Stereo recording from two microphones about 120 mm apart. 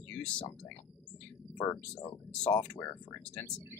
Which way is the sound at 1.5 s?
15° left (ahead or behind).